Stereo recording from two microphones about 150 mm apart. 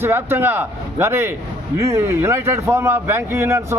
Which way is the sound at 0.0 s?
15° right (ahead or behind).